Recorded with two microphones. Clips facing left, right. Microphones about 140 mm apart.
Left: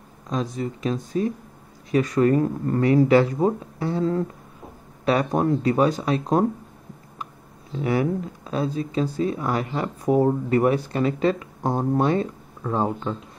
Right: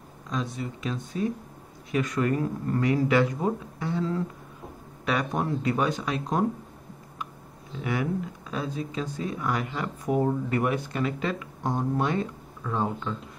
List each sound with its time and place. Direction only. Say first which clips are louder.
0.3 s speech: left 5 dB; 40° left (ahead or behind)
7.8 s speech: left 6 dB; 35° left (ahead or behind)